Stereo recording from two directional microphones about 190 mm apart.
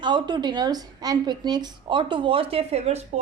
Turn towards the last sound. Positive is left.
turn(degrees=-35)  # may be behind; listen again after turning